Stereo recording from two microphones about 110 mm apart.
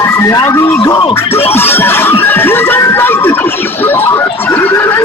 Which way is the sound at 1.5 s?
20° left (ahead or behind).